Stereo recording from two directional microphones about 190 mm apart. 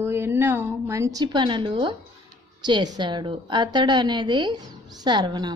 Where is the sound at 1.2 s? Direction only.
25° right (ahead or behind).